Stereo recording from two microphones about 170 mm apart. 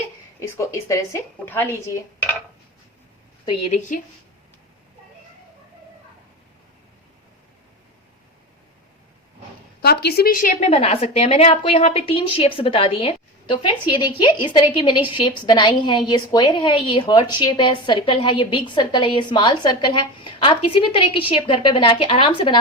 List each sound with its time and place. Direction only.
0.5 s speech: 15° left (ahead or behind)
3.7 s a woman's voice: 50° left (ahead or behind)
9.8 s a woman's voice: 70° left (ahead or behind); by 22.5 s 30° left (ahead or behind)